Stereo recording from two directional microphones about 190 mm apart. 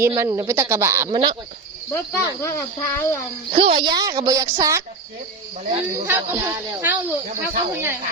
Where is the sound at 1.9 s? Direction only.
15° left (ahead or behind).